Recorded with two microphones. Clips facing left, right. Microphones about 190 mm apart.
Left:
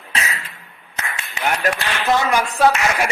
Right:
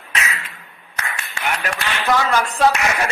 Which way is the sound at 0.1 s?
35° left (ahead or behind).